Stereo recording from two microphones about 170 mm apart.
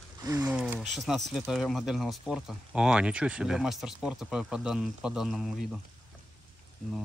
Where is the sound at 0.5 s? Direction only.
5° right (ahead or behind).